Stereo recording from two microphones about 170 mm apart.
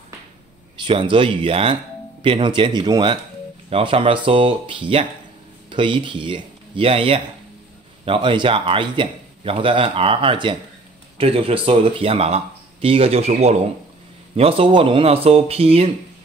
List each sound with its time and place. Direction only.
0.8 s a man's voice: 30° right (ahead or behind)